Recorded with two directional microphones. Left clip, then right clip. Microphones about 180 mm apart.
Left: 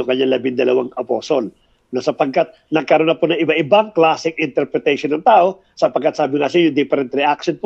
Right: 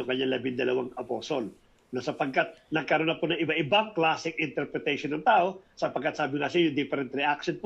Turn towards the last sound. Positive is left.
turn(degrees=30)  # may be behind; listen again after turning